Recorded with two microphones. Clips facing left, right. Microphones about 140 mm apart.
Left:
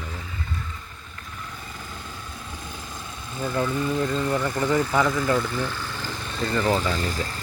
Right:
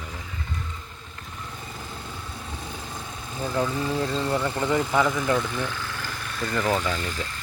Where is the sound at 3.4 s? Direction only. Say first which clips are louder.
Even; 15° right (ahead or behind).